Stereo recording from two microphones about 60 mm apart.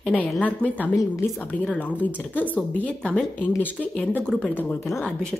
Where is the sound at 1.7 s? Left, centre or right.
Left.